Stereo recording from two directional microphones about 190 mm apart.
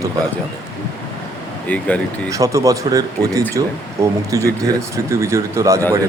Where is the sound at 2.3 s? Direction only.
15° right (ahead or behind).